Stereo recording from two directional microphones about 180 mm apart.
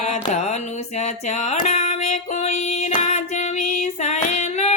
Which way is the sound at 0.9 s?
40° left (ahead or behind).